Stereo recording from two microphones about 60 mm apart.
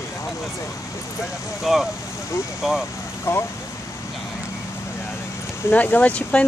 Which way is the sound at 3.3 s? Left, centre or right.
Left.